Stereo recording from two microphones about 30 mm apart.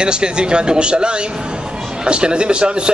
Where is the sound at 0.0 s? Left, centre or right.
Right.